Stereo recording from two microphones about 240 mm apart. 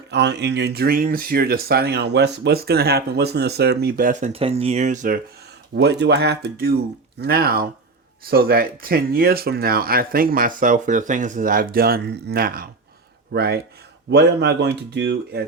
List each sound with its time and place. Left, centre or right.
0.1 s speech: right
5.7 s speech: right